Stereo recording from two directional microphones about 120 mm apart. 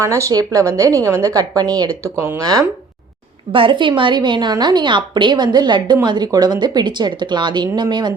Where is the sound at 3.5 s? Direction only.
45° right (ahead or behind).